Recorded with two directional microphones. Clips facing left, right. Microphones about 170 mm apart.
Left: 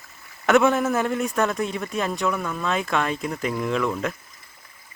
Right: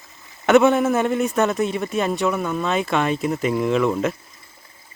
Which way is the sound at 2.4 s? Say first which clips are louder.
Right 5 dB; 25° right (ahead or behind).